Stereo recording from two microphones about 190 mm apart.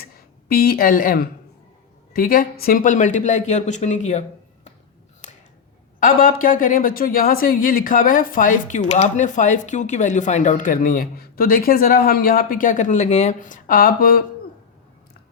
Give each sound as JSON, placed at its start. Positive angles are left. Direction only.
{"t": 0.4, "sound": "speech", "side_deg": 55}
{"t": 5.2, "sound": "a sound", "side_deg": 40}
{"t": 6.0, "sound": "speech", "side_deg": 50}